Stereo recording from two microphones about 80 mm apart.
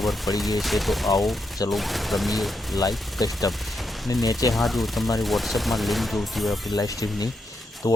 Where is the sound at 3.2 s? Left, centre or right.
Left.